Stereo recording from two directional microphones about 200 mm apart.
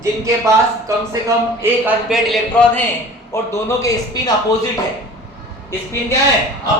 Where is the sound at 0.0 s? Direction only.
15° right (ahead or behind); by 2.8 s 5° left (ahead or behind).